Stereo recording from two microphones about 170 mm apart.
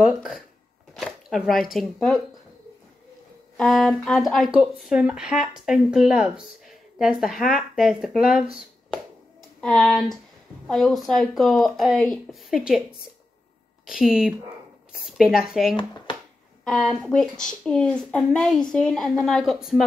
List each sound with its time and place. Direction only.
0.0 s speech: centre (ahead or behind)
3.5 s speech: 5° left (ahead or behind)
15.7 s speech: 25° left (ahead or behind)
16.6 s speech: centre (ahead or behind)